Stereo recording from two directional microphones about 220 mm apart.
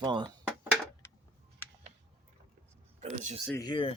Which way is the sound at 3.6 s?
20° left (ahead or behind).